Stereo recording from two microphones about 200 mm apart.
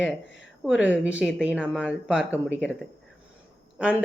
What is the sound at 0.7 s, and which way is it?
Speech, 5° right (ahead or behind).